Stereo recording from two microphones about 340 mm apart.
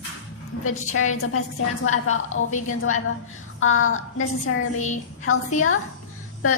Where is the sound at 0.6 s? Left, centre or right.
Left.